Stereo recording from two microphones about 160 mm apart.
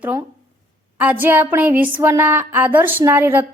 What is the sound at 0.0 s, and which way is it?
A woman's voice, 15° right (ahead or behind).